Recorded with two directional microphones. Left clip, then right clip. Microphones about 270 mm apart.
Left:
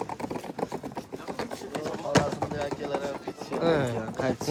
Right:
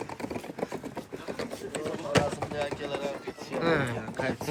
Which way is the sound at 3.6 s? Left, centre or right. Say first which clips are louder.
Left 2 dB; centre.